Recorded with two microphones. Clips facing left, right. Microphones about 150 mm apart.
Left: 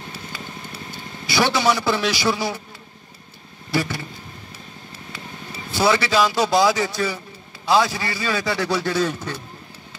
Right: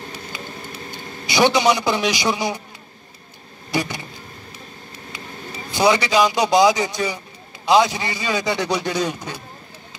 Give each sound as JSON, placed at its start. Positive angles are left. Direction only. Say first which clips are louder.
{"t": 1.2, "sound": "a man's voice", "louder": "right 3 dB", "side_deg": -15}
{"t": 3.7, "sound": "vehicle", "louder": "even", "side_deg": -15}
{"t": 5.7, "sound": "a man's voice", "louder": "right 2 dB", "side_deg": -15}